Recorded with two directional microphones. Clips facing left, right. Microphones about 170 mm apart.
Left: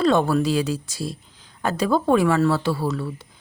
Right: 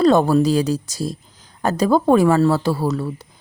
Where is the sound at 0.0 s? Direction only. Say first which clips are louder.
Right 5 dB; 40° right (ahead or behind).